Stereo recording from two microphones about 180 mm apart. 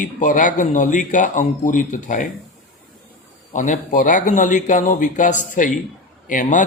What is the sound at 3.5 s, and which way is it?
A man's voice, 45° left (ahead or behind).